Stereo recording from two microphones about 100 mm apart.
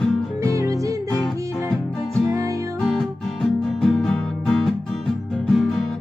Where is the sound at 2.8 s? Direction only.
5° left (ahead or behind).